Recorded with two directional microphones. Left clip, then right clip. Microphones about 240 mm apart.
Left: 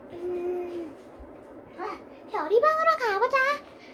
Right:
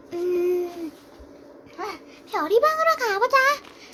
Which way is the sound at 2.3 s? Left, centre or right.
Right.